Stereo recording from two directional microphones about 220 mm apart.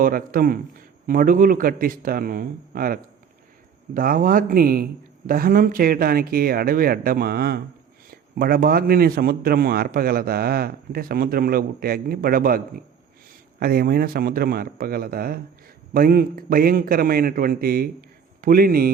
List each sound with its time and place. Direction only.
0.0 s a man's voice: 40° right (ahead or behind)